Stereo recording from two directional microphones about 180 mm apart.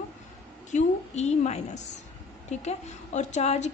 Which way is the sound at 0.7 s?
40° left (ahead or behind).